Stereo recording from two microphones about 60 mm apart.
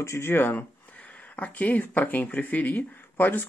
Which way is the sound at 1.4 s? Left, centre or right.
Left.